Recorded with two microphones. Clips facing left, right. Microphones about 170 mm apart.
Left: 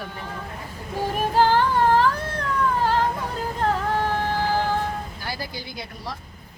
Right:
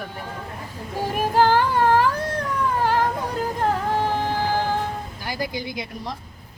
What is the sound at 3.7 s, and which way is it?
Music, 15° right (ahead or behind).